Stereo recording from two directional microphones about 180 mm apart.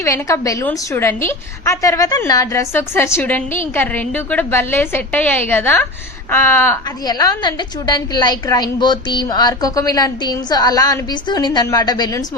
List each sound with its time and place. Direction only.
0.0 s a woman's voice: 15° left (ahead or behind)